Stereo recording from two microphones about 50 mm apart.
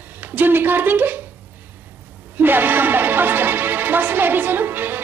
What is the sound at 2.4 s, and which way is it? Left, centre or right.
Music, right.